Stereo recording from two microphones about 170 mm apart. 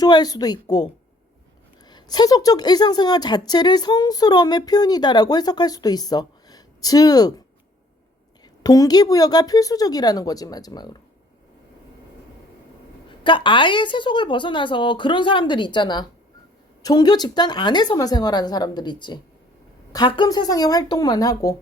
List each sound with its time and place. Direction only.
0.0 s a woman's voice: 25° left (ahead or behind)
1.9 s a woman's voice: 25° left (ahead or behind)
8.6 s a woman's voice: 20° left (ahead or behind)
13.1 s a woman's voice: 30° left (ahead or behind)